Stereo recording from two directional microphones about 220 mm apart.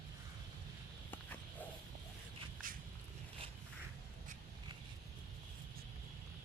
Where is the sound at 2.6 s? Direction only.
40° right (ahead or behind).